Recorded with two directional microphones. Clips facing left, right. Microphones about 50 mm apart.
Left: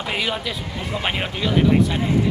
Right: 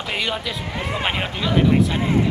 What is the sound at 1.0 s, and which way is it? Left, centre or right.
Speech, centre.